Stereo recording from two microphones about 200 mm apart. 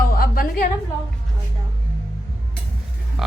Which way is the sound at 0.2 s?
45° left (ahead or behind).